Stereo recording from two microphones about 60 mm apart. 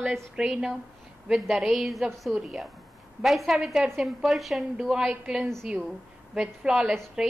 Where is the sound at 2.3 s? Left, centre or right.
Centre.